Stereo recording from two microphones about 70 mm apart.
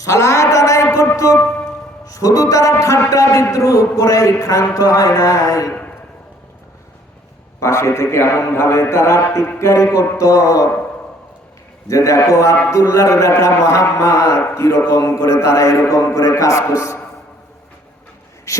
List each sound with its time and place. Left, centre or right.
0.0 s a man's voice: left
7.6 s a man's voice: left
11.9 s a man's voice: left
18.5 s a sound: left